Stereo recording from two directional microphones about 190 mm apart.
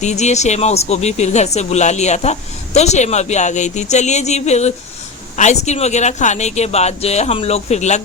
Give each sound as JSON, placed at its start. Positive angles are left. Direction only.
{"t": 0.0, "sound": "speech", "side_deg": 35}